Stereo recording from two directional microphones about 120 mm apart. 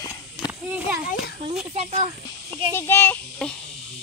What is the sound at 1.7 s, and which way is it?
Speech, 65° right (ahead or behind).